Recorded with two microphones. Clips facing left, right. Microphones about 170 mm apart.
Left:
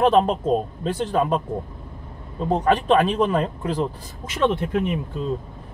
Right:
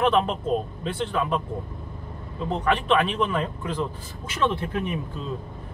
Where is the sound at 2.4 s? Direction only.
40° left (ahead or behind).